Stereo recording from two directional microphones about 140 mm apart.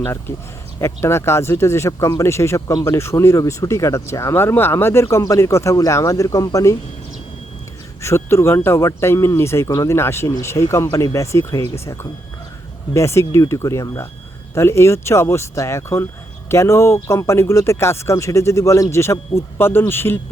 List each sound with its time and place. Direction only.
0.0 s speech: 20° left (ahead or behind)
8.0 s speech: 20° left (ahead or behind)
12.9 s a man's voice: 20° left (ahead or behind)